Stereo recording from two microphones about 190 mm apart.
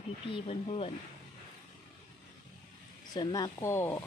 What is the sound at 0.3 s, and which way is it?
Speech, 30° left (ahead or behind).